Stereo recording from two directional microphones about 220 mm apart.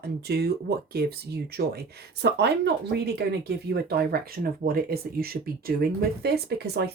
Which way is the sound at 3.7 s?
45° right (ahead or behind).